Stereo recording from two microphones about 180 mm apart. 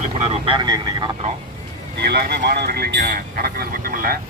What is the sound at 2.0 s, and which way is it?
Speech, 65° right (ahead or behind).